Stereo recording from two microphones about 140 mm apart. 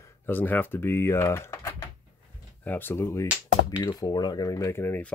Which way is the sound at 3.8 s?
30° left (ahead or behind).